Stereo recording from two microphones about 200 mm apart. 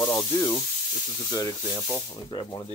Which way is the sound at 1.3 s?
15° left (ahead or behind).